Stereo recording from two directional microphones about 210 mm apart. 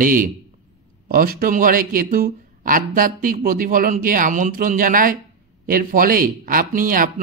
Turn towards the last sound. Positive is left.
turn(degrees=-40)  # may be behind; listen again after turning